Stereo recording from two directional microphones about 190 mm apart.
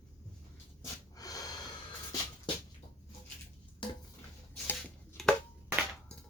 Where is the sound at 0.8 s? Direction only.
20° left (ahead or behind).